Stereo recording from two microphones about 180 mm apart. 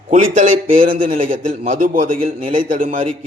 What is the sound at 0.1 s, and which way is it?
A man's voice, 45° right (ahead or behind).